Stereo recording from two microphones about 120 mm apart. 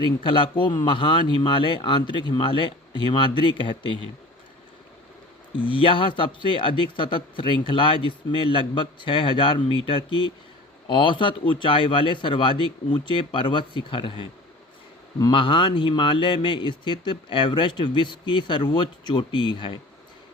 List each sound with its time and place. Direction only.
0.2 s speech: 45° left (ahead or behind)
5.5 s speech: 45° left (ahead or behind)